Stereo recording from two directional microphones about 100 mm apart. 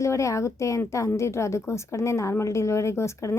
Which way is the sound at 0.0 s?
30° left (ahead or behind).